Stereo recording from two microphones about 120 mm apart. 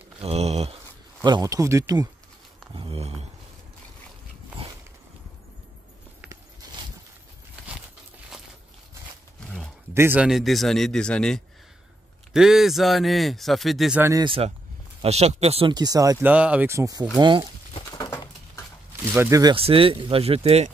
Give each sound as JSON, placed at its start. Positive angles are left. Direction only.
{"t": 0.2, "sound": "a sound", "side_deg": -60}
{"t": 1.2, "sound": "speech", "side_deg": -35}
{"t": 2.7, "sound": "a sound", "side_deg": -45}
{"t": 3.0, "sound": "a sound", "side_deg": -60}
{"t": 9.9, "sound": "speech", "side_deg": -20}
{"t": 10.2, "sound": "a man's voice", "side_deg": 0}
{"t": 14.1, "sound": "speech", "side_deg": -45}
{"t": 15.0, "sound": "speech", "side_deg": -60}
{"t": 15.7, "sound": "speech", "side_deg": -30}
{"t": 16.2, "sound": "speech", "side_deg": -10}
{"t": 16.6, "sound": "speech", "side_deg": -25}
{"t": 17.2, "sound": "speech", "side_deg": -40}
{"t": 19.1, "sound": "speech", "side_deg": -20}
{"t": 19.5, "sound": "speech", "side_deg": -50}